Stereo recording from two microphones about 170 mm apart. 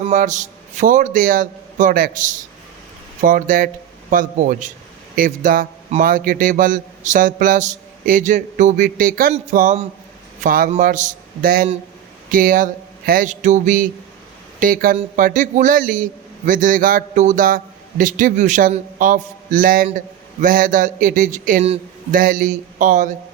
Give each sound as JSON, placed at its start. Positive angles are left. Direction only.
{"t": 0.0, "sound": "a man's voice", "side_deg": -45}